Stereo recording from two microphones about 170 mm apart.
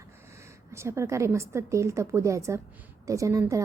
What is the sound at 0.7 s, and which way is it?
A woman's voice, 15° right (ahead or behind).